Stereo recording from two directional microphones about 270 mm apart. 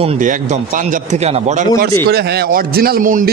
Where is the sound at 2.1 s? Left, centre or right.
Right.